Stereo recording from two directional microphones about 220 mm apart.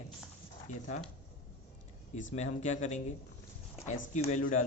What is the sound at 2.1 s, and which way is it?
Speech, 35° left (ahead or behind).